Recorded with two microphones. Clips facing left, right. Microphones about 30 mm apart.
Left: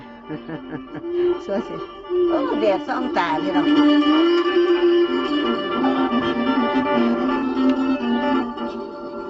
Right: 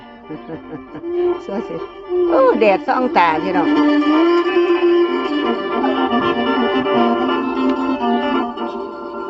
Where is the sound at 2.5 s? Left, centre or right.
Right.